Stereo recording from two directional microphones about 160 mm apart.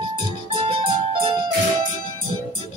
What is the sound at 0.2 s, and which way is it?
Music, 30° right (ahead or behind).